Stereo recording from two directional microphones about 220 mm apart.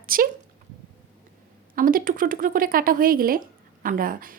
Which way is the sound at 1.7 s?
40° right (ahead or behind).